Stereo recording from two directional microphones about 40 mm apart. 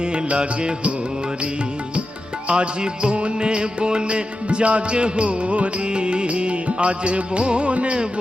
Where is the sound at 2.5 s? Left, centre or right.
Right.